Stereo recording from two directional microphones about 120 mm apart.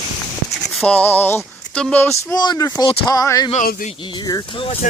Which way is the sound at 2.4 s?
35° left (ahead or behind).